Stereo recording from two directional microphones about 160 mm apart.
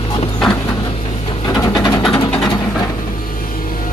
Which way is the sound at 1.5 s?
25° left (ahead or behind).